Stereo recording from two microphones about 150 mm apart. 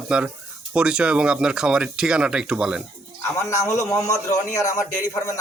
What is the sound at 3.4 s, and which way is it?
Speech, 20° left (ahead or behind).